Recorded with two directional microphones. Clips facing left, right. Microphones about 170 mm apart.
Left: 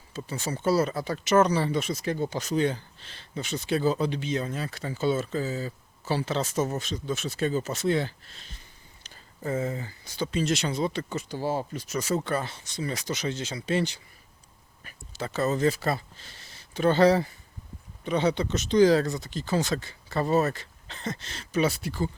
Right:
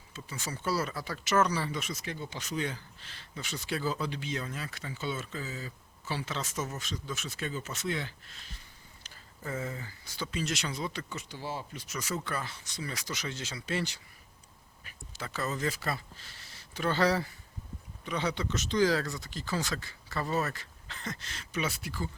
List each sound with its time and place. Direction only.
0.1 s speech: 35° left (ahead or behind)
11.1 s speech: 40° left (ahead or behind); by 14.0 s 20° left (ahead or behind)
15.2 s speech: 25° left (ahead or behind)